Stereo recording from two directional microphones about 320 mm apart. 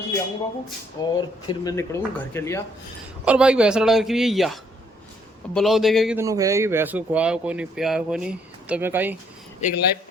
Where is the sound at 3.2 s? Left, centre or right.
Centre.